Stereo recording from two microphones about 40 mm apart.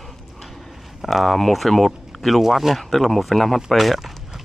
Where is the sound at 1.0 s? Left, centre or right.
Centre.